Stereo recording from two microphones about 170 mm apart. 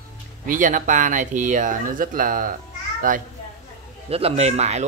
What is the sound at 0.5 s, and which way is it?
Speech, 50° right (ahead or behind).